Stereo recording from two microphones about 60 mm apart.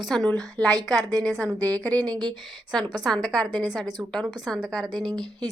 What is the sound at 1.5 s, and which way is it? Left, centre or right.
Speech, right.